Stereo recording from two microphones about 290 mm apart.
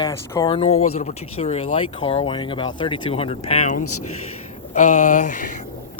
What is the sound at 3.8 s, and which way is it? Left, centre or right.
Speech, left.